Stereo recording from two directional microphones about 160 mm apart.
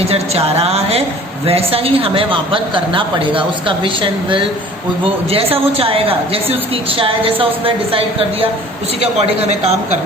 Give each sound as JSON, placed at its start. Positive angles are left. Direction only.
{"t": 0.0, "sound": "a woman's voice", "side_deg": -40}